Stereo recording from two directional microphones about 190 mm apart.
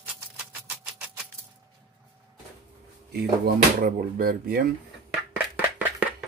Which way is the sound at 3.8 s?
45° right (ahead or behind).